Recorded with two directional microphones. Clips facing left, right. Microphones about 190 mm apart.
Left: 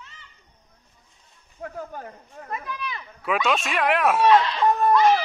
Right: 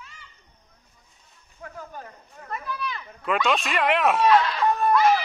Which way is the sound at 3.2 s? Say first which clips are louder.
Even; 5° left (ahead or behind).